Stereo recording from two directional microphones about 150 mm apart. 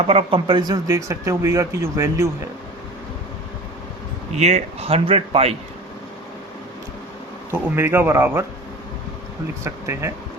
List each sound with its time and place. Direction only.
0.1 s speech: 40° right (ahead or behind); by 2.3 s 20° right (ahead or behind)
4.4 s speech: 50° right (ahead or behind)
7.5 s a man's voice: 15° right (ahead or behind)
9.6 s speech: 20° right (ahead or behind)